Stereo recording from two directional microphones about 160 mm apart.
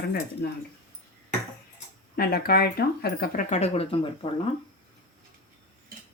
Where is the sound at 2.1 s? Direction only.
70° left (ahead or behind).